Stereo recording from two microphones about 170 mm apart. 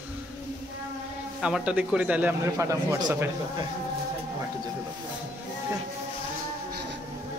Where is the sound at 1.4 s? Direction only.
5° right (ahead or behind).